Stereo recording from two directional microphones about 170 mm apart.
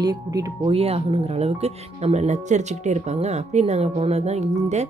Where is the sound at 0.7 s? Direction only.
35° right (ahead or behind).